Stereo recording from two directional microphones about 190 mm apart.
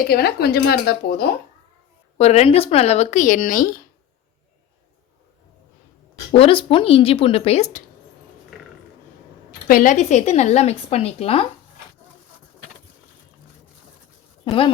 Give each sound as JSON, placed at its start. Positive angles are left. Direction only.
{"t": 0.1, "sound": "speech", "side_deg": 55}
{"t": 2.1, "sound": "a woman's voice", "side_deg": 35}
{"t": 6.3, "sound": "speech", "side_deg": 30}
{"t": 9.6, "sound": "a woman's voice", "side_deg": 45}
{"t": 14.4, "sound": "speech", "side_deg": 25}